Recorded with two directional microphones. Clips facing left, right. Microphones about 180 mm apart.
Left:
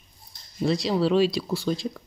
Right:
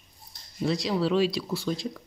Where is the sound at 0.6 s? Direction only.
30° left (ahead or behind).